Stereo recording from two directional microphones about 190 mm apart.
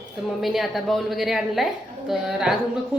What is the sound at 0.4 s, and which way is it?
A woman's voice, centre (ahead or behind).